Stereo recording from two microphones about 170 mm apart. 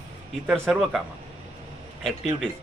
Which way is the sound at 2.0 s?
Centre (ahead or behind).